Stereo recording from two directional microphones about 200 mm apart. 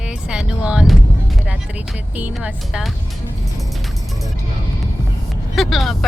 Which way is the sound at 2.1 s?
5° right (ahead or behind).